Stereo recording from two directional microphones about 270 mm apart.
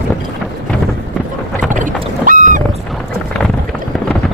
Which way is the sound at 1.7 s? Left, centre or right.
Right.